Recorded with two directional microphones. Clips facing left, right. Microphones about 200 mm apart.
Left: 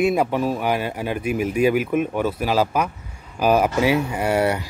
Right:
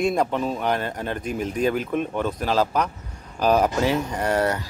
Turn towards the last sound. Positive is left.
turn(degrees=10)  # may be behind; listen again after turning